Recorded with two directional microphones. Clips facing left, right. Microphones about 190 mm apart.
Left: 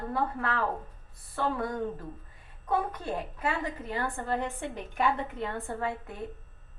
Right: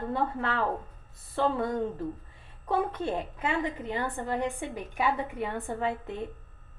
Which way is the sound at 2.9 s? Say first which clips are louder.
Right 3 dB; 25° right (ahead or behind).